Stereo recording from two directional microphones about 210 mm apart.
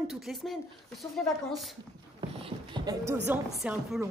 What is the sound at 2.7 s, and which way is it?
Speech, 20° right (ahead or behind).